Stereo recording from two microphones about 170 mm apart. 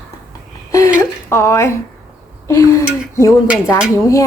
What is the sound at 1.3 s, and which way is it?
A woman's voice, 15° left (ahead or behind).